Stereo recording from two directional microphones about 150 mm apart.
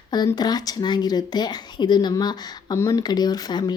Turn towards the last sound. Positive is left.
turn(degrees=30)  # may be behind; listen again after turning